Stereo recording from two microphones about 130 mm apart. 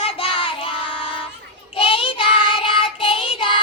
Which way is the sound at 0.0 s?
45° left (ahead or behind).